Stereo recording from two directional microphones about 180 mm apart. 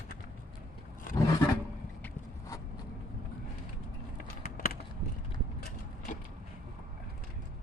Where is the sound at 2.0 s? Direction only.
20° left (ahead or behind).